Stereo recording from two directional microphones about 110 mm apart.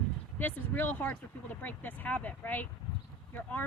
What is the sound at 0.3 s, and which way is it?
A woman's voice, 15° left (ahead or behind).